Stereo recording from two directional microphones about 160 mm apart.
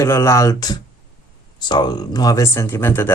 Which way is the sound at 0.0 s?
20° left (ahead or behind).